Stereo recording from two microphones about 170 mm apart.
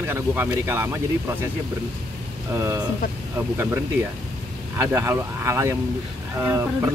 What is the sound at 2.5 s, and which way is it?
Speech, 15° right (ahead or behind).